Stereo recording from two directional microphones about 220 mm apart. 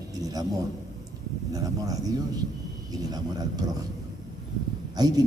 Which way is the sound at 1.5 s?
15° right (ahead or behind).